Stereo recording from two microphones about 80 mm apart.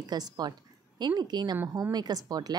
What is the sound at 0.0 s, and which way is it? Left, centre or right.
A woman's voice, right.